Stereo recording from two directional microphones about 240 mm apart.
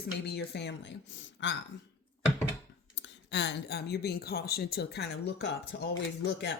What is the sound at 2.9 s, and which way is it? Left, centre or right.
Speech, left.